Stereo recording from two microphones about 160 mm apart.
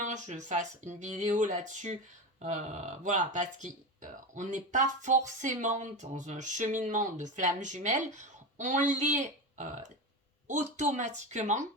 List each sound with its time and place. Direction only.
0.0 s speech: 50° right (ahead or behind)